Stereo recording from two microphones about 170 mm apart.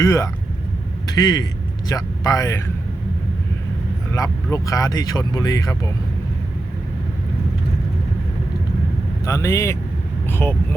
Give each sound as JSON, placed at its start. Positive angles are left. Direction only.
{"t": 0.0, "sound": "speech", "side_deg": 20}
{"t": 4.1, "sound": "speech", "side_deg": 20}
{"t": 9.2, "sound": "speech", "side_deg": 20}